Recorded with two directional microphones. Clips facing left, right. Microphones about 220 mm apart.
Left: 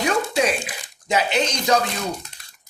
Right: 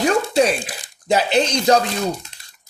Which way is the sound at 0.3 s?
35° right (ahead or behind).